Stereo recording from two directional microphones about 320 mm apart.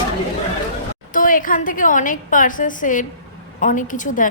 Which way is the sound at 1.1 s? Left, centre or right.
Left.